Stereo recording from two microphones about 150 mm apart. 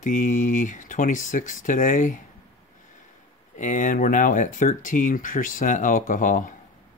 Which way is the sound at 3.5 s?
60° left (ahead or behind).